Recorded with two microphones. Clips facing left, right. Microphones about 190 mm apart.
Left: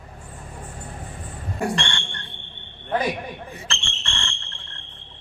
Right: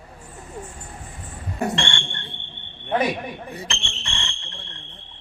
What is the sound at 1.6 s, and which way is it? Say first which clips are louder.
Fire alarm: right 1 dB; 25° right (ahead or behind).